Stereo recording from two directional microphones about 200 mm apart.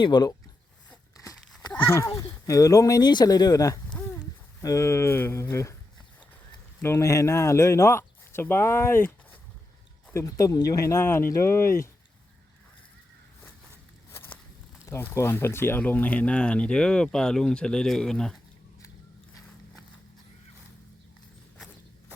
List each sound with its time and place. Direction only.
0.0 s speech: 20° left (ahead or behind)
0.9 s a sound: 15° left (ahead or behind)
2.0 s speech: 15° left (ahead or behind)
6.8 s speech: 15° left (ahead or behind)
14.1 s walk: 10° left (ahead or behind)
14.8 s speech: 15° left (ahead or behind)